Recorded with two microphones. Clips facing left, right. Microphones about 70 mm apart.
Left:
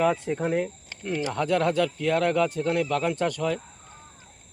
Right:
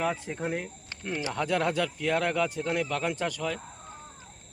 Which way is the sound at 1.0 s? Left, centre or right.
Centre.